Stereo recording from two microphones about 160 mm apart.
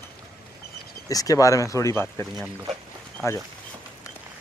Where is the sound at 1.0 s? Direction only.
20° left (ahead or behind).